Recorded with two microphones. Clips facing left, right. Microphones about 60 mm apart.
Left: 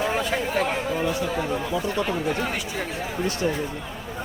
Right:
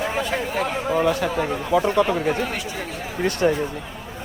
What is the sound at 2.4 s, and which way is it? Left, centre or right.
Speech, centre.